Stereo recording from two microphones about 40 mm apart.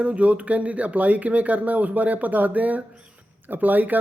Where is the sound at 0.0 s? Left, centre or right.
Right.